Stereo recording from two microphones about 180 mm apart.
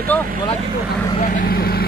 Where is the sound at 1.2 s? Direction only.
50° left (ahead or behind).